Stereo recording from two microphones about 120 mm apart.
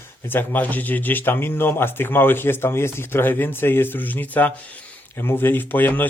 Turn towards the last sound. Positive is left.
turn(degrees=15)  # may be behind; listen again after turning